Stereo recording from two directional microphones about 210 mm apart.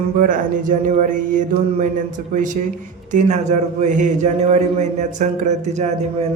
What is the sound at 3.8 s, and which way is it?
Speech, 35° right (ahead or behind).